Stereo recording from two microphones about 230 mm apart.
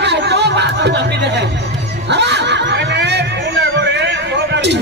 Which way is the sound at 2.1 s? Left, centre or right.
Right.